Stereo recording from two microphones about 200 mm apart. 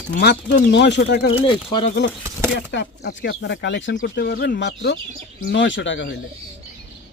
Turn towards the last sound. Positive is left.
turn(degrees=65)  # may be behind; listen again after turning